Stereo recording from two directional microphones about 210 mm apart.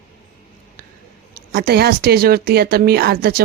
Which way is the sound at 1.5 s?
50° right (ahead or behind).